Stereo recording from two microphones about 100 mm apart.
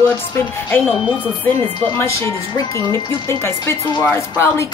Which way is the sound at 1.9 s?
30° left (ahead or behind).